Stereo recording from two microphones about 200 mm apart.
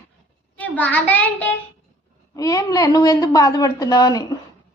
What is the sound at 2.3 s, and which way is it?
A woman's voice, 15° left (ahead or behind).